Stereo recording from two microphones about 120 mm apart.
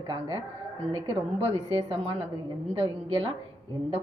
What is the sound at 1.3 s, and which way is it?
Speech, 55° right (ahead or behind).